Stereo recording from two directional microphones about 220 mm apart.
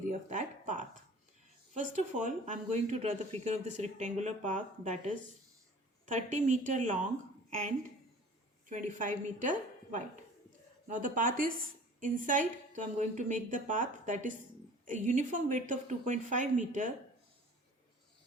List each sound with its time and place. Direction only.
0.1 s a woman's voice: 35° right (ahead or behind)
6.1 s a woman's voice: 30° right (ahead or behind)
8.7 s a woman's voice: 35° right (ahead or behind)